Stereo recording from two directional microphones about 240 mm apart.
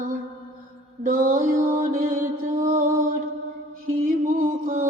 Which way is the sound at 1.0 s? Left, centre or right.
Right.